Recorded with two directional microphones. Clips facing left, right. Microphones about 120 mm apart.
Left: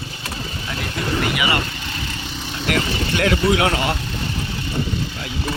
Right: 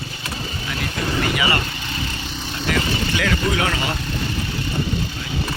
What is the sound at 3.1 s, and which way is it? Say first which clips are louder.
Speech: left 6 dB; 60° left (ahead or behind).